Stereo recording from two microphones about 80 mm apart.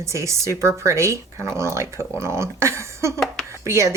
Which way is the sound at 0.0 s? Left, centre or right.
Right.